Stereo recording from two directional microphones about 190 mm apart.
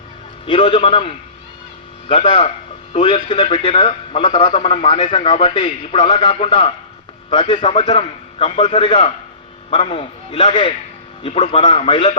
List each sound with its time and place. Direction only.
0.4 s a man's voice: 25° left (ahead or behind)